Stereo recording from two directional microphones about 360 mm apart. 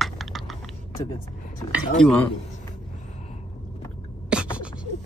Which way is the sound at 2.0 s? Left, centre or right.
Centre.